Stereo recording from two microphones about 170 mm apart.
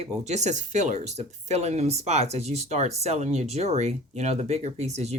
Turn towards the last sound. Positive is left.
turn(degrees=-40)  # may be behind; listen again after turning